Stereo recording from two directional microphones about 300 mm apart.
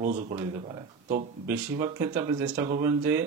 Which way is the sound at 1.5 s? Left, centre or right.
Centre.